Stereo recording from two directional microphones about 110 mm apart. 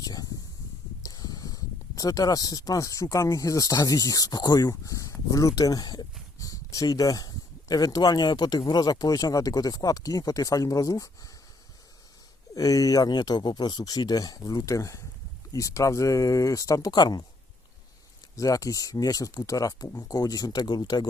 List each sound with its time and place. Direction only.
0.0 s a sound: 35° left (ahead or behind)
1.0 s speech: 35° left (ahead or behind)
12.5 s speech: 35° left (ahead or behind)
18.3 s speech: 30° left (ahead or behind)